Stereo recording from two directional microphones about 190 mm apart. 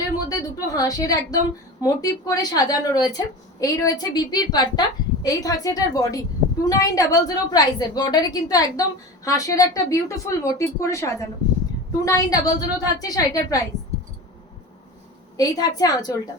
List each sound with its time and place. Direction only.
0.3 s a sound: 20° left (ahead or behind)
1.8 s a woman's voice: 20° left (ahead or behind)
15.4 s a woman's voice: 20° left (ahead or behind)